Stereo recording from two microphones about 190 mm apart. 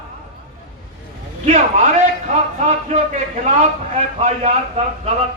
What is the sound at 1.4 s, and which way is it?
A man's voice, 40° right (ahead or behind).